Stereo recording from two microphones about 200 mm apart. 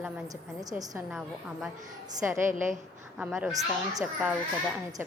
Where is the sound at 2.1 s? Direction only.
15° right (ahead or behind).